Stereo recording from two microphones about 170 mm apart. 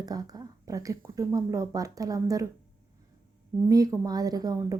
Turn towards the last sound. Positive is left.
turn(degrees=-20)  # may be behind; listen again after turning